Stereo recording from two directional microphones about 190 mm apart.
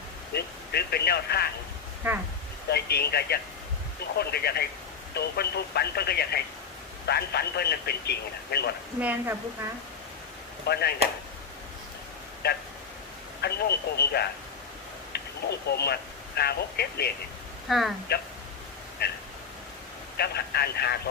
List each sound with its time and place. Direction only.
0.3 s speech: 60° left (ahead or behind)
2.6 s speech: 55° left (ahead or behind)
9.0 s a woman's voice: 10° right (ahead or behind)
10.7 s speech: 60° left (ahead or behind)
13.4 s speech: 60° left (ahead or behind)
17.7 s speech: centre (ahead or behind)
19.0 s speech: 55° left (ahead or behind)